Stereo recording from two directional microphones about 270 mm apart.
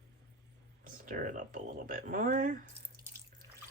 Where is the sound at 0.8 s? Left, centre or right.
Right.